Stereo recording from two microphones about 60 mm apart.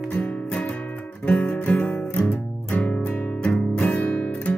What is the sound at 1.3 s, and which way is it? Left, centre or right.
Music, left.